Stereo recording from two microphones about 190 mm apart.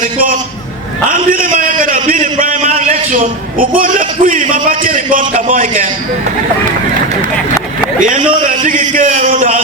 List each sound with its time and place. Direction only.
1.1 s a man's voice: 45° right (ahead or behind)
8.0 s a man's voice: 45° right (ahead or behind)